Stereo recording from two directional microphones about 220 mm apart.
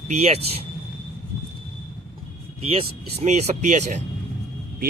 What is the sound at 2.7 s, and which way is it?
Speech, 30° right (ahead or behind).